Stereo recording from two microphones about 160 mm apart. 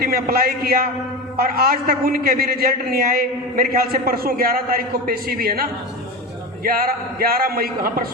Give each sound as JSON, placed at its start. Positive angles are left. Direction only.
{"t": 0.0, "sound": "a man's voice", "side_deg": -65}